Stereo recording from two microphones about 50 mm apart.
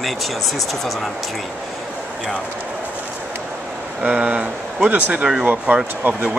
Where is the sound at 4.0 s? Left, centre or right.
Right.